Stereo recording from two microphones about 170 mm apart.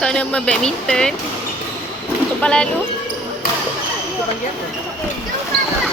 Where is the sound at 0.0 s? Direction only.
5° left (ahead or behind).